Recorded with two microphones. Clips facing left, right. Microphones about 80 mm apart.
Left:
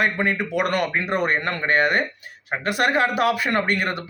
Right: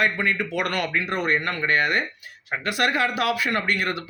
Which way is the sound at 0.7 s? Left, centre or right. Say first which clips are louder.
Left 3 dB; left.